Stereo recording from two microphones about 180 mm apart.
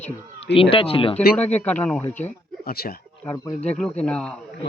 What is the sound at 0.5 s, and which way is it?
Speech, 30° left (ahead or behind).